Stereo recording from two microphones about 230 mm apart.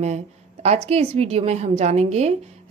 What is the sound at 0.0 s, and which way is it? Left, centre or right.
A woman's voice, right.